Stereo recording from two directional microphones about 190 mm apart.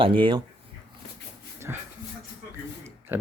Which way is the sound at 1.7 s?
15° right (ahead or behind).